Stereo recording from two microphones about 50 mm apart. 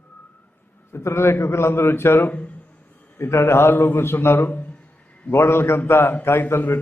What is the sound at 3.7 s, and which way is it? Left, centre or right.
Speech, left.